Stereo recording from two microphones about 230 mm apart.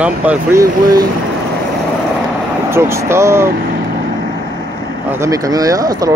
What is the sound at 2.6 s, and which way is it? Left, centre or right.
Speech, centre.